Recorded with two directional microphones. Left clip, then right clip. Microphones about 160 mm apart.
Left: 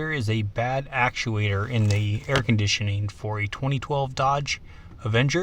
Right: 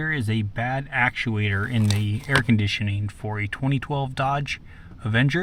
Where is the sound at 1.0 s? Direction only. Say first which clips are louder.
Right 1 dB; 25° left (ahead or behind).